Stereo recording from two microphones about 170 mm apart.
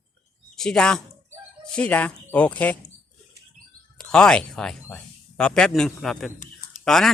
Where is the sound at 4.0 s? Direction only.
5° left (ahead or behind).